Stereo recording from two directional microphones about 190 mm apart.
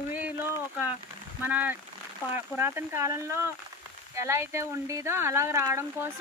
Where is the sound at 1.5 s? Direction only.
10° right (ahead or behind).